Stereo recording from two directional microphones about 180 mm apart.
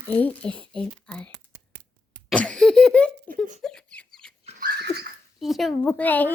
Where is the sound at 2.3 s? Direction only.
5° left (ahead or behind).